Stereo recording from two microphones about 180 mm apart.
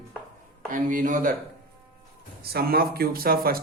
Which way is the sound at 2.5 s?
60° right (ahead or behind).